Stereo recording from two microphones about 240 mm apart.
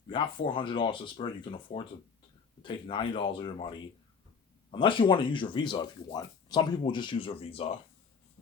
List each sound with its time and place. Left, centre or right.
0.1 s speech: left